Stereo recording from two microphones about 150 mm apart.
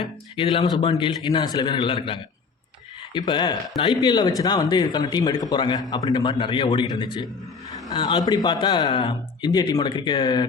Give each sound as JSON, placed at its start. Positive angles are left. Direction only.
{"t": 0.3, "sound": "a man's voice", "side_deg": 35}